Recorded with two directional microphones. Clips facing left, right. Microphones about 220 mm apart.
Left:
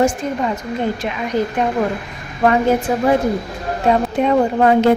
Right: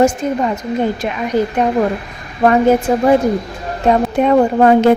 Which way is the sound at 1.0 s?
45° right (ahead or behind).